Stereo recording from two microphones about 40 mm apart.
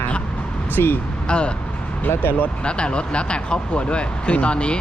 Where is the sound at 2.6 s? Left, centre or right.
Left.